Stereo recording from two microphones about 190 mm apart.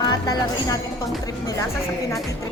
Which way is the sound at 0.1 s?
20° left (ahead or behind).